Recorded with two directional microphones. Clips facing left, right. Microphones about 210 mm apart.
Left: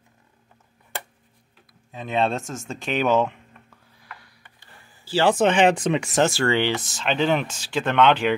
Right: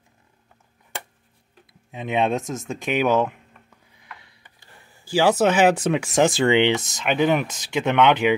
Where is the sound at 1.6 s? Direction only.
20° right (ahead or behind).